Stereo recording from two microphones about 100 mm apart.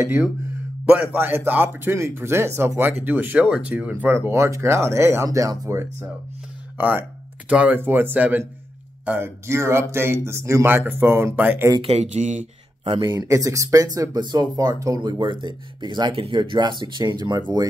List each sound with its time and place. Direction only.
0.0 s a man's voice: 25° right (ahead or behind)
11.8 s speech: 85° right
12.8 s speech: 55° right (ahead or behind)
13.3 s speech: 35° right (ahead or behind)